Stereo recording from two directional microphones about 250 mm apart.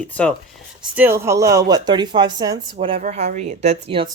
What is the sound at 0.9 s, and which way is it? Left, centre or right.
Speech, centre.